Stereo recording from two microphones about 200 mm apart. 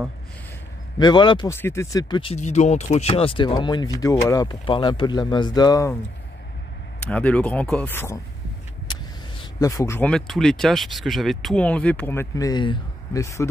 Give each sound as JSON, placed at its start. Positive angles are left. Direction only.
{"t": 0.9, "sound": "speech", "side_deg": 20}
{"t": 1.5, "sound": "speech", "side_deg": 15}
{"t": 7.0, "sound": "speech", "side_deg": 5}
{"t": 9.6, "sound": "speech", "side_deg": 15}